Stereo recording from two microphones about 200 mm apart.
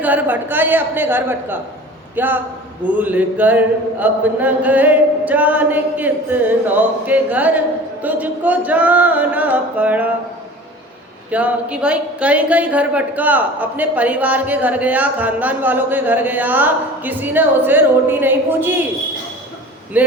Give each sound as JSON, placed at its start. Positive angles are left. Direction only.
{"t": 0.0, "sound": "a man's voice", "side_deg": -10}
{"t": 11.3, "sound": "a man's voice", "side_deg": -5}
{"t": 19.9, "sound": "a man's voice", "side_deg": -10}